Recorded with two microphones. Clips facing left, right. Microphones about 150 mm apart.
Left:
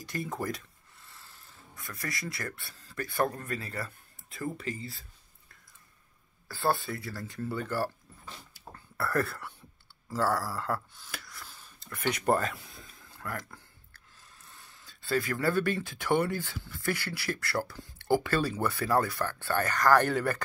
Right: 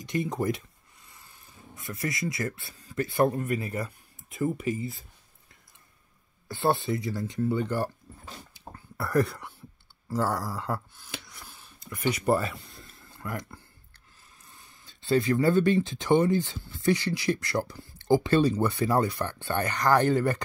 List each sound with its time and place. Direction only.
0.0 s speech: 20° right (ahead or behind)
6.4 s speech: 20° right (ahead or behind)
8.9 s speech: 15° right (ahead or behind)
11.4 s a sound: 10° right (ahead or behind)
15.0 s speech: 25° right (ahead or behind)